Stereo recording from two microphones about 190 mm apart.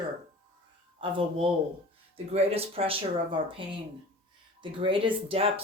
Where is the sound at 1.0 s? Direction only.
25° right (ahead or behind).